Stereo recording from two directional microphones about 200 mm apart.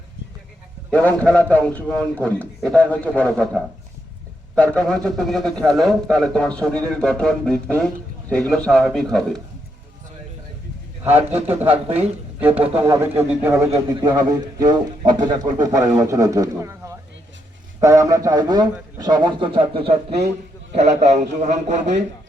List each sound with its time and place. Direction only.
0.9 s a man's voice: 5° left (ahead or behind)
11.7 s a man's voice: 30° right (ahead or behind)
12.8 s a man's voice: 15° right (ahead or behind); by 22.0 s 35° right (ahead or behind)